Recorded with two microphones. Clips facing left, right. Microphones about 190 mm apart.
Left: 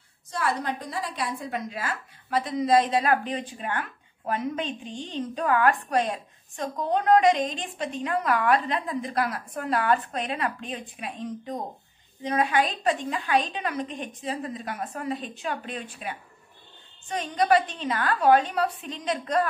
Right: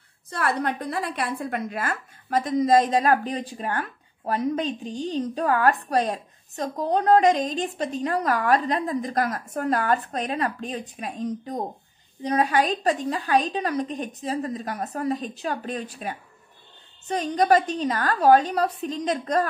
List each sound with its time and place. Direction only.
0.3 s a woman's voice: 60° right (ahead or behind); by 19.4 s 40° right (ahead or behind)